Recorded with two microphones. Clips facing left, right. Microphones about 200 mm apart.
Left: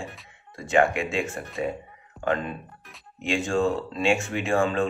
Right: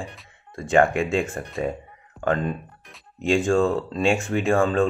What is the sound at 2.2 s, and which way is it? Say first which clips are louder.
Speech: right 3 dB; 45° right (ahead or behind).